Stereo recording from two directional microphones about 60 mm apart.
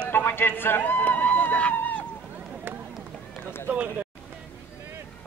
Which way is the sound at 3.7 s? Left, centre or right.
Right.